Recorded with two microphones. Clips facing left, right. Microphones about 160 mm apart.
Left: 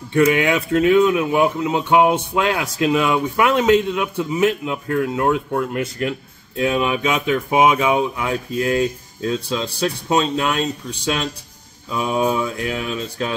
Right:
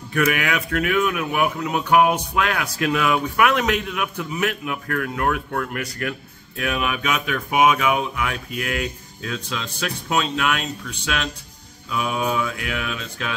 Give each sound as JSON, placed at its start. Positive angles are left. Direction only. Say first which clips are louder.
{"t": 0.1, "sound": "speech", "louder": "left 6 dB", "side_deg": 25}